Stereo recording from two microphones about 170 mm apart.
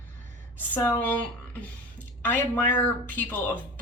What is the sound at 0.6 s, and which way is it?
Speech, 15° left (ahead or behind).